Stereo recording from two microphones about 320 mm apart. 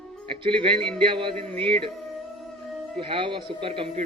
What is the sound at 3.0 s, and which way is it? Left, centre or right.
A man's voice, centre.